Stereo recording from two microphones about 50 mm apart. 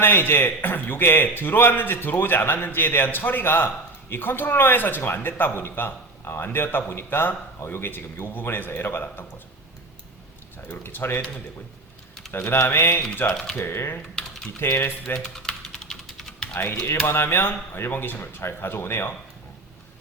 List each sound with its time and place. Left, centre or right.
0.0 s a man's voice: left
10.7 s a man's voice: left
12.3 s a man's voice: left
14.2 s typing: centre
14.6 s a man's voice: left
15.2 s typing: centre
17.1 s a man's voice: left